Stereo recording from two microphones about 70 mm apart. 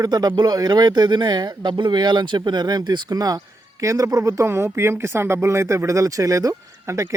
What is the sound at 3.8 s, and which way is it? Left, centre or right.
Speech, right.